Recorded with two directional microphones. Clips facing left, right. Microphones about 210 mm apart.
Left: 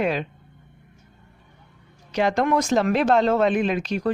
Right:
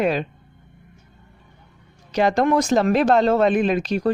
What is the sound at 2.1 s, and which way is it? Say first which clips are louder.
Speech: right 3 dB; 35° right (ahead or behind).